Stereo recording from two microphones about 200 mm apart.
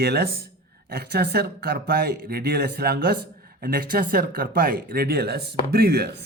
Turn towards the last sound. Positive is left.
turn(degrees=-55)  # may be behind; listen again after turning